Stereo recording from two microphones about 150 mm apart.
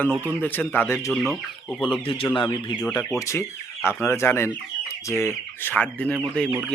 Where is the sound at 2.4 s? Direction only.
25° left (ahead or behind).